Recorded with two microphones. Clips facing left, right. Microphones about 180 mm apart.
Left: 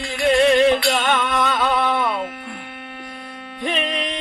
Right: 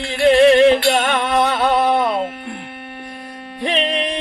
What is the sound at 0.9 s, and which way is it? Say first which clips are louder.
Music: right 3 dB; 40° right (ahead or behind).